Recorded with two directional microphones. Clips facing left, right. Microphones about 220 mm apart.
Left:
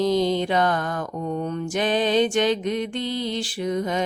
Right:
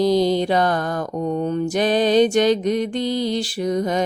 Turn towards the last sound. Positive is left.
turn(degrees=-40)  # may be behind; listen again after turning